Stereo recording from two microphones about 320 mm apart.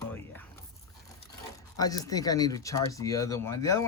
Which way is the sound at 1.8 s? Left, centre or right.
Centre.